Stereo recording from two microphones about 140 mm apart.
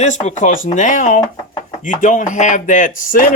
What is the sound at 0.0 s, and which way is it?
Speech, 55° left (ahead or behind).